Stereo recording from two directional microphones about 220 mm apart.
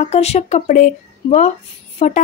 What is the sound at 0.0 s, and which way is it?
A woman's voice, 30° left (ahead or behind).